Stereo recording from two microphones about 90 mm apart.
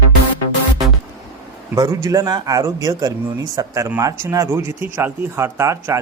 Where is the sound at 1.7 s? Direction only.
40° right (ahead or behind).